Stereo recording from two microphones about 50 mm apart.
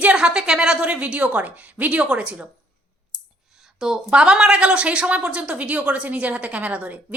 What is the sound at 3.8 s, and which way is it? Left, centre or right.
A woman's voice, centre.